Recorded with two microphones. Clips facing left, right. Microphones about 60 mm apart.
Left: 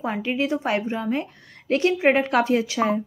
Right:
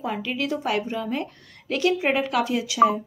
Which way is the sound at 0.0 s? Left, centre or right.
Left.